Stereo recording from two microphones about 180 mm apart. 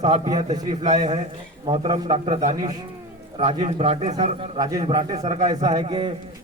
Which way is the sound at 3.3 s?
35° right (ahead or behind).